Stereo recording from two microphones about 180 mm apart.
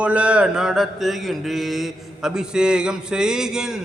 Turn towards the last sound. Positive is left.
turn(degrees=-5)  # may be behind; listen again after turning